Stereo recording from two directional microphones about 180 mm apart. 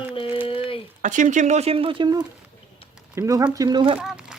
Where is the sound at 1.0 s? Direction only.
45° right (ahead or behind); by 4.0 s 25° right (ahead or behind).